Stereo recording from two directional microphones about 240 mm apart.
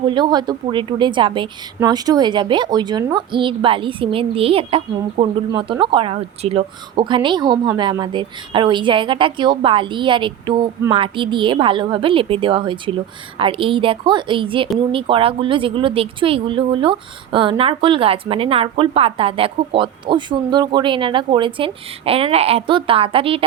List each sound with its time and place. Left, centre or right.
0.0 s a woman's voice: centre